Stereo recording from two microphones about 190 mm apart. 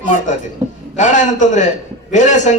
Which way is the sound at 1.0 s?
40° left (ahead or behind).